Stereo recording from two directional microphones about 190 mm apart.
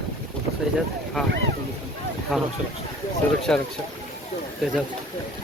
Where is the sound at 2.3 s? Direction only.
Centre (ahead or behind).